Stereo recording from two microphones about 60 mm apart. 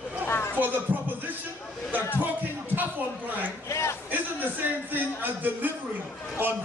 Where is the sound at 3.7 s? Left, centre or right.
Left.